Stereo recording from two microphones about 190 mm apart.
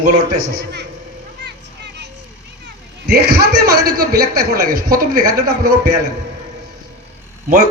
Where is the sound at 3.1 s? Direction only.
55° right (ahead or behind).